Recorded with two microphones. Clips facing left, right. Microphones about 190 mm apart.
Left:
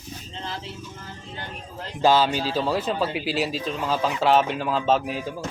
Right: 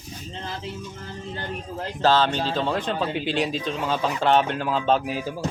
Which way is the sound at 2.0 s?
10° left (ahead or behind).